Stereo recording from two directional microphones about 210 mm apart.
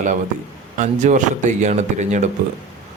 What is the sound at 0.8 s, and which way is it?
Speech, 35° right (ahead or behind).